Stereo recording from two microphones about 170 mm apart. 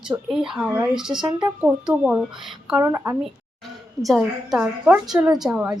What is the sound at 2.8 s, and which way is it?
Speech, 15° right (ahead or behind).